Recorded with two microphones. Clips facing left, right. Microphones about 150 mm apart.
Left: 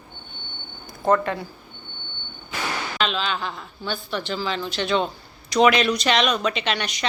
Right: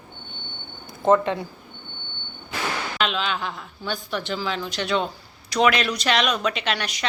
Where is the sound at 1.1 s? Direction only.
20° right (ahead or behind).